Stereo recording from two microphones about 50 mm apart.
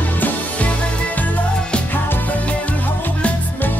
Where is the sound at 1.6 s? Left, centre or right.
Centre.